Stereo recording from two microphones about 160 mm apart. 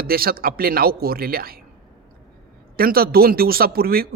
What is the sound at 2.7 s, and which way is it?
A man's voice, 70° right (ahead or behind).